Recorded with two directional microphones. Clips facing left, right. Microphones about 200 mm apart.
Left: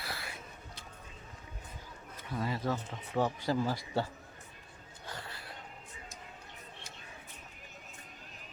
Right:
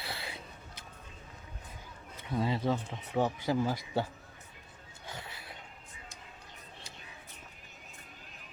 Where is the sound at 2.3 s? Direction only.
25° right (ahead or behind).